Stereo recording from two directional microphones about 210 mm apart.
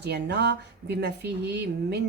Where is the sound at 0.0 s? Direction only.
55° right (ahead or behind).